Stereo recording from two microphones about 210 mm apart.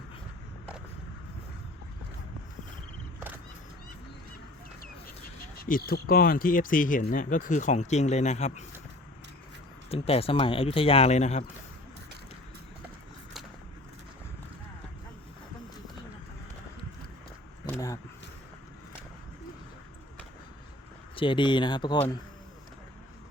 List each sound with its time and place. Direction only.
5.5 s speech: 40° left (ahead or behind)
9.9 s speech: 30° left (ahead or behind)
17.7 s a sound: 15° left (ahead or behind)
21.2 s speech: 25° left (ahead or behind)